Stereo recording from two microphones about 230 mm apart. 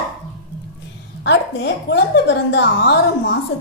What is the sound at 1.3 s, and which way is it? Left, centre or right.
A woman's voice, left.